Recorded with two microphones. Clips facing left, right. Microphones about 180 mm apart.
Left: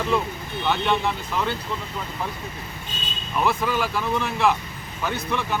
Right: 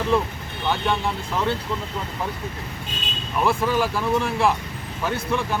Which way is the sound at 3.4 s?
30° right (ahead or behind).